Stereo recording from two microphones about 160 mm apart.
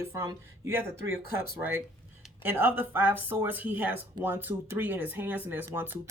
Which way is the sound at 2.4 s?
15° right (ahead or behind).